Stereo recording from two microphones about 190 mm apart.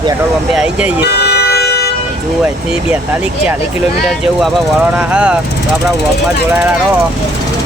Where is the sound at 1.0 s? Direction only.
60° left (ahead or behind).